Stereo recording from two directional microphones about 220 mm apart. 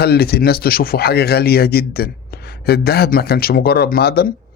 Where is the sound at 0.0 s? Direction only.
45° left (ahead or behind).